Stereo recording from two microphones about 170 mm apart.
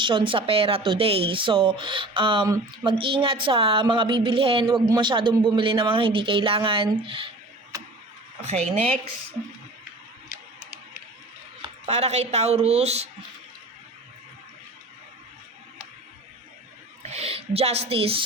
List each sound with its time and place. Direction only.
0.0 s speech: 30° right (ahead or behind)
8.4 s speech: 40° right (ahead or behind)
11.9 s speech: 40° right (ahead or behind)
17.0 s speech: 40° right (ahead or behind)